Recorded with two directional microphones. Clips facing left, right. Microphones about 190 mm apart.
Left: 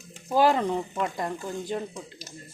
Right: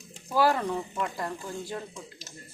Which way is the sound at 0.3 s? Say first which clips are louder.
Left 3 dB; 20° left (ahead or behind).